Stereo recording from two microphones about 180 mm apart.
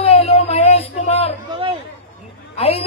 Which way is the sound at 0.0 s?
35° left (ahead or behind).